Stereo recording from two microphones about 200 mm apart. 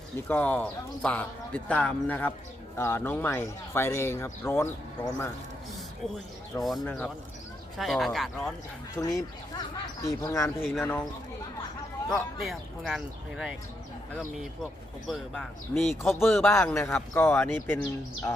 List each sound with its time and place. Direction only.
0.3 s speech: 10° left (ahead or behind)
6.6 s speech: centre (ahead or behind)
9.0 s speech: 15° left (ahead or behind)
12.1 s speech: centre (ahead or behind)
16.1 s speech: 10° left (ahead or behind)